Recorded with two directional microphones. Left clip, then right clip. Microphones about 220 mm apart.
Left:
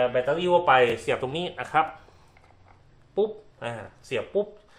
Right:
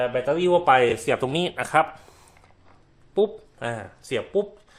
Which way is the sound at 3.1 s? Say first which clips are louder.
Right 3 dB; 55° right (ahead or behind).